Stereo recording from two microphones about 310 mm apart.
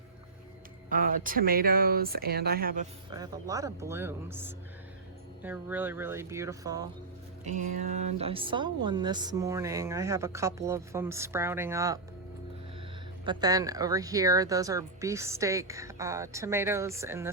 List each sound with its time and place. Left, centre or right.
0.9 s speech: right
3.1 s a woman's voice: centre
7.4 s a woman's voice: right
13.2 s a woman's voice: centre